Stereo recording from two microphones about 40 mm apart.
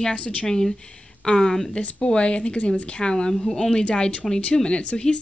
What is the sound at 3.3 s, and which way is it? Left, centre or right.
Speech, centre.